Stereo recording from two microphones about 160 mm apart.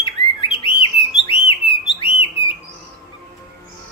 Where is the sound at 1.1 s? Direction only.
35° left (ahead or behind).